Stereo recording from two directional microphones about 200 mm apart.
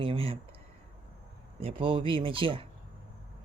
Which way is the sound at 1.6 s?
25° right (ahead or behind).